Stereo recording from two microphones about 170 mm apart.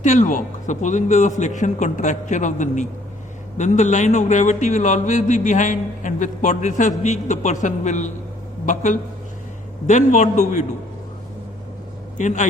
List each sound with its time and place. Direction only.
0.0 s a man's voice: 45° left (ahead or behind)
12.1 s a man's voice: 45° left (ahead or behind)